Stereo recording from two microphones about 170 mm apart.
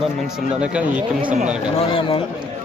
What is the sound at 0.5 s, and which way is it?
Speech, 5° right (ahead or behind).